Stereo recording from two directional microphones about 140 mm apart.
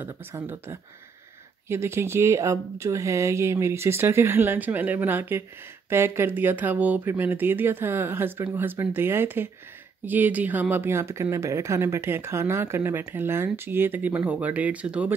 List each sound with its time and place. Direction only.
0.0 s speech: 15° right (ahead or behind)